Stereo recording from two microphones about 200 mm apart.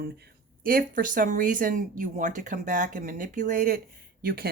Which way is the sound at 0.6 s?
45° right (ahead or behind).